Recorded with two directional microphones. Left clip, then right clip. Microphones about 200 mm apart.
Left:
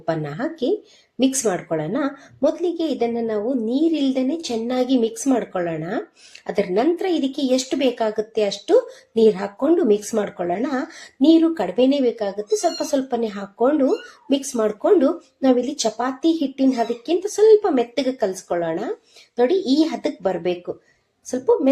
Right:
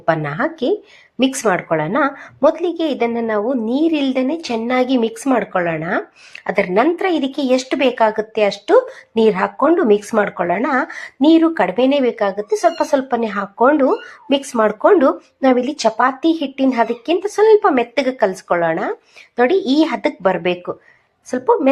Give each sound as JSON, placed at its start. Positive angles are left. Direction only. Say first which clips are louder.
{"t": 0.0, "sound": "speech", "louder": "right 7 dB", "side_deg": 0}
{"t": 19.5, "sound": "speech", "louder": "right 4 dB", "side_deg": -30}
{"t": 19.8, "sound": "speech", "louder": "right 5 dB", "side_deg": -5}